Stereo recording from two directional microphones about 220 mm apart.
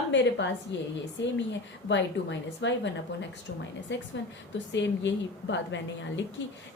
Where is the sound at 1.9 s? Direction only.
55° left (ahead or behind).